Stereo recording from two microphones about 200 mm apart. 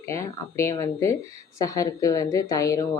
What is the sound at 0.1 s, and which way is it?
A woman's voice, 15° left (ahead or behind).